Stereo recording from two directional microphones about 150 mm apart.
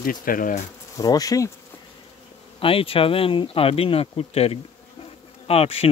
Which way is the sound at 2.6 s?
35° left (ahead or behind).